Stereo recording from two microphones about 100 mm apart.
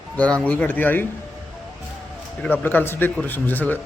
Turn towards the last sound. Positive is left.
turn(degrees=20)  # may be behind; listen again after turning